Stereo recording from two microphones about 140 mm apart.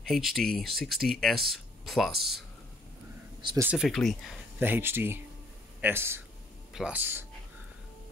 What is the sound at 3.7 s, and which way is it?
Speech, centre (ahead or behind).